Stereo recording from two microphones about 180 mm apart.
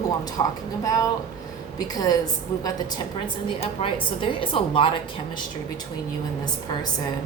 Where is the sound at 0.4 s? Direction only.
25° left (ahead or behind).